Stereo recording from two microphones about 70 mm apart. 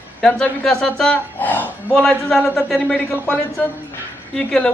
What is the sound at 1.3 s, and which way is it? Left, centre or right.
Speech, left.